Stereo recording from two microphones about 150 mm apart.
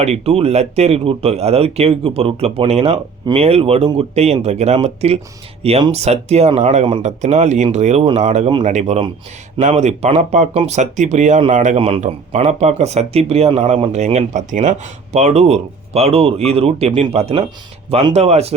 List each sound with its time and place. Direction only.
0.0 s speech: 45° right (ahead or behind)